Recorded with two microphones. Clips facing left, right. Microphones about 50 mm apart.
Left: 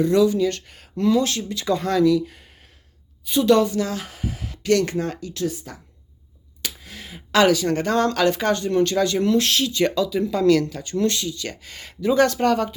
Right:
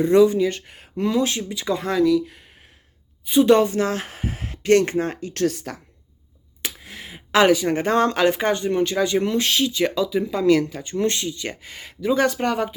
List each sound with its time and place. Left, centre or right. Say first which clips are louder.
0.0 s speech: right 2 dB; right; by 2.4 s centre
3.2 s speech: right 2 dB; right
5.3 s speech: right 4 dB; right
6.6 s speech: right 1 dB; right
11.7 s speech: left 1 dB; centre